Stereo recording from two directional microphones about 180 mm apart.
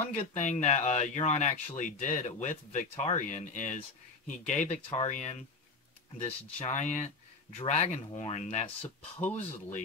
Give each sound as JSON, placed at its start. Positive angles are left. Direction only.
{"t": 0.1, "sound": "speech", "side_deg": 40}